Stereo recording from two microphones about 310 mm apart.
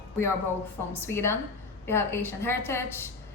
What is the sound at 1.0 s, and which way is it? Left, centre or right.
A woman's voice, centre.